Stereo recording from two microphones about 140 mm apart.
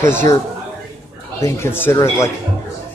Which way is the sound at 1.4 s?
20° left (ahead or behind).